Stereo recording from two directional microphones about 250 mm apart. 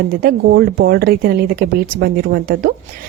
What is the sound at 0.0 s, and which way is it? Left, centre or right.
A woman's voice, right.